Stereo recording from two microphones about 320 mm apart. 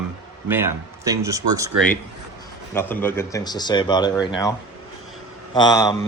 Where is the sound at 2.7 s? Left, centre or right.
Centre.